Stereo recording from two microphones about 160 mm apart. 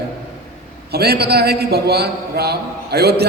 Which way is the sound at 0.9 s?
80° right.